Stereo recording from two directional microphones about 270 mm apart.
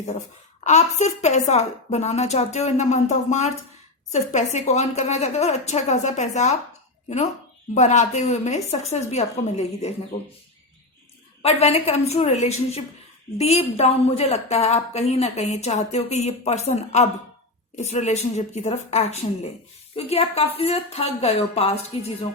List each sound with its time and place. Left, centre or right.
0.6 s a woman's voice: left
7.7 s a woman's voice: left
11.4 s a woman's voice: left